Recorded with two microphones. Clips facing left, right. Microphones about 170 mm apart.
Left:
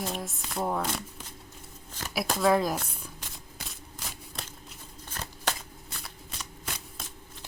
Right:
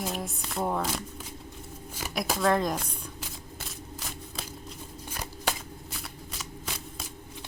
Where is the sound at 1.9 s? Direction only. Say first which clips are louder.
Right 1 dB; 10° right (ahead or behind).